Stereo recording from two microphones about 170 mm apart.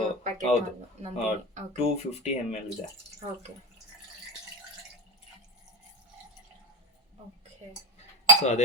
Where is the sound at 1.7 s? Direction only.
40° left (ahead or behind).